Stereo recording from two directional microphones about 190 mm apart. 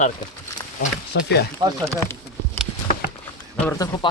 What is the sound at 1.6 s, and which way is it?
Speech, 25° right (ahead or behind).